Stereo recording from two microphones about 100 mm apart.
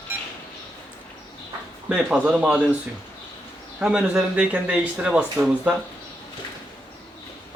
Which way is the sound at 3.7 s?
10° right (ahead or behind).